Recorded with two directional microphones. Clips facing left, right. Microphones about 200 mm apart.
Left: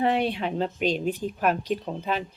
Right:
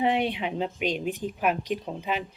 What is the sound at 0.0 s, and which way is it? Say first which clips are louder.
Speech: left 1 dB; 15° right (ahead or behind).